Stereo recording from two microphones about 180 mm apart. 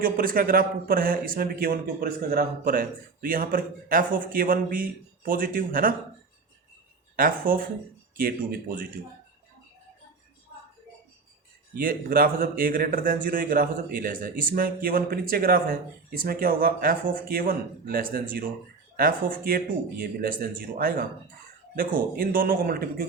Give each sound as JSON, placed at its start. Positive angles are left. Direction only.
{"t": 0.0, "sound": "speech", "side_deg": -50}
{"t": 7.2, "sound": "speech", "side_deg": -50}
{"t": 11.8, "sound": "speech", "side_deg": -50}
{"t": 19.5, "sound": "speech", "side_deg": -55}